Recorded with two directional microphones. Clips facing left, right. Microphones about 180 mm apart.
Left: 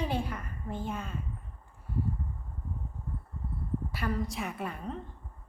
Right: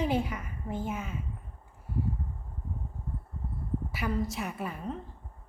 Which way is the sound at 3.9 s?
5° right (ahead or behind).